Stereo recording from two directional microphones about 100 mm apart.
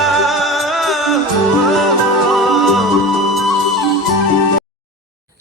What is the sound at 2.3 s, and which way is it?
Music, centre (ahead or behind).